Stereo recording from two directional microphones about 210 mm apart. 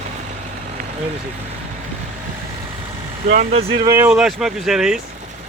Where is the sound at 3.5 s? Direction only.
30° right (ahead or behind).